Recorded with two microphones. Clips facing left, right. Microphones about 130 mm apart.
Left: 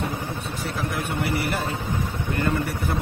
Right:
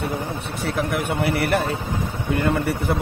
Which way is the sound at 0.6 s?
60° right (ahead or behind).